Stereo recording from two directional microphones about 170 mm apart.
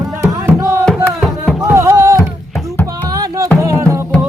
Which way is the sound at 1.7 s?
15° right (ahead or behind).